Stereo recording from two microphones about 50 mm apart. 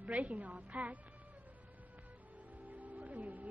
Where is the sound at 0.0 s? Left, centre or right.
Right.